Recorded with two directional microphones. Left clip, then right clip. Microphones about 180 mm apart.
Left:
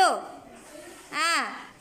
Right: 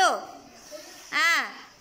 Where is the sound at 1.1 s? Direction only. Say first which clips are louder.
Right 3 dB; 5° left (ahead or behind).